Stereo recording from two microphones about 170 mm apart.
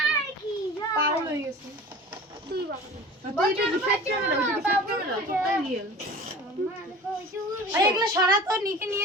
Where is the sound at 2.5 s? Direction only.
70° right (ahead or behind).